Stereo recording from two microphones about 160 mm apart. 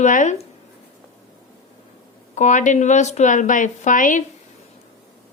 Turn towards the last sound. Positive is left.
turn(degrees=55)  # may be behind; listen again after turning